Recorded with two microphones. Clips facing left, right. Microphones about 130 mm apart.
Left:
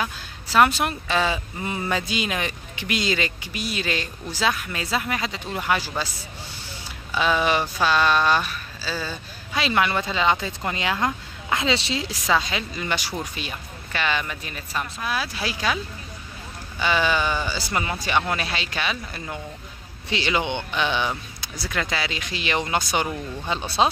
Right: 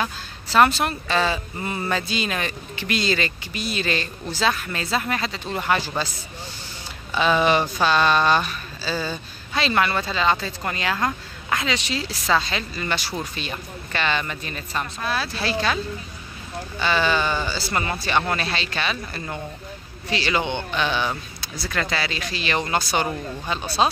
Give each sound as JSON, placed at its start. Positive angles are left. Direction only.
{"t": 0.0, "sound": "speech", "side_deg": 10}
{"t": 7.2, "sound": "speech", "side_deg": 5}
{"t": 12.0, "sound": "speech", "side_deg": 15}
{"t": 16.8, "sound": "speech", "side_deg": 15}